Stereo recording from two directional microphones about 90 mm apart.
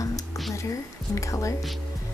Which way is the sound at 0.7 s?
35° left (ahead or behind).